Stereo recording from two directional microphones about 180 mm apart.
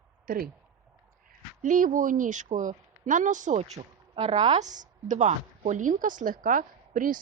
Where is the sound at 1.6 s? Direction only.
45° right (ahead or behind).